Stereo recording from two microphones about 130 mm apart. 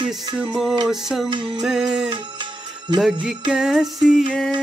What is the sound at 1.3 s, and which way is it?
Music, 40° right (ahead or behind).